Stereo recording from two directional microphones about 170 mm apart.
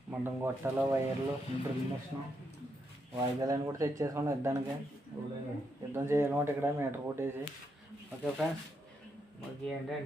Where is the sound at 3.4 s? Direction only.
20° right (ahead or behind).